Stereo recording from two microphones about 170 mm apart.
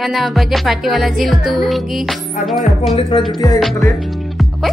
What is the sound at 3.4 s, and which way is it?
Music, 20° left (ahead or behind).